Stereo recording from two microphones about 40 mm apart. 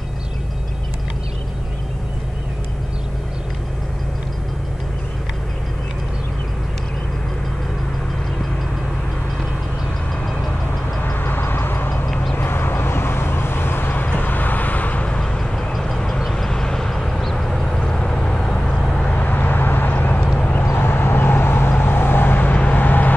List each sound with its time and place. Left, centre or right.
11.1 s vehicle: left
14.0 s vehicle: left
15.3 s vehicle: centre
17.7 s vehicle: left
19.0 s vehicle: left
20.2 s horse: left
20.7 s vehicle: left
22.4 s vehicle: left